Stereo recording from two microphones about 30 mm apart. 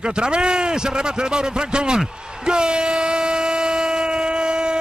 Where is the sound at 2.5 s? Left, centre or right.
Right.